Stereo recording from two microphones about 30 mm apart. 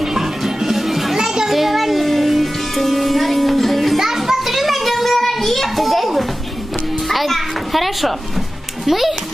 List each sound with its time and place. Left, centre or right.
0.0 s music: centre
1.1 s children playing: centre
1.5 s music: centre
4.0 s child singing: centre
7.1 s children playing: centre
8.8 s a child's voice: centre